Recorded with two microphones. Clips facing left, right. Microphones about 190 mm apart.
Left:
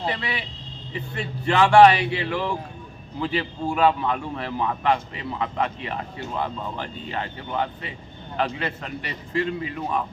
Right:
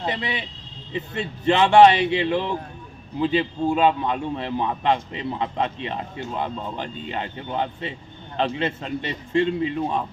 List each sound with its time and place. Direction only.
0.0 s a man's voice: 20° right (ahead or behind)